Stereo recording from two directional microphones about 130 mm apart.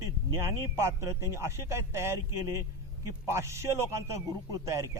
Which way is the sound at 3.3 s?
20° right (ahead or behind).